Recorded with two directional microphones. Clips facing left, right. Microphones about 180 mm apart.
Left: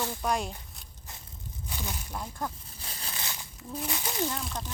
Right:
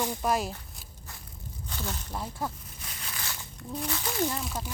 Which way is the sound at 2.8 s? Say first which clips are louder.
Left 1 dB; 30° left (ahead or behind).